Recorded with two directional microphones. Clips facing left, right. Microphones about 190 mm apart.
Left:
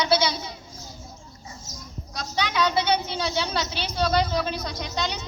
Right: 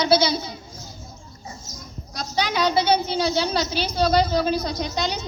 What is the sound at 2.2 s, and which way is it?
A woman's voice, 35° right (ahead or behind).